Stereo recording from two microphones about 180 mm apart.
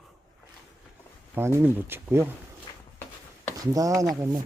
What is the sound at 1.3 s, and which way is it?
Speech, 10° right (ahead or behind).